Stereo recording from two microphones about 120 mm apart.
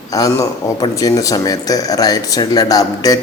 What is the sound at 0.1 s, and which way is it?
Speech, 30° left (ahead or behind).